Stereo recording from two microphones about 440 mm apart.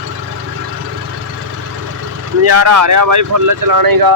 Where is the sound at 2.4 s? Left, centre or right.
Right.